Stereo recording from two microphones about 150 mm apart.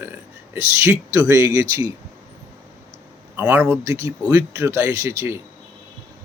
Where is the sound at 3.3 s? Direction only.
15° right (ahead or behind).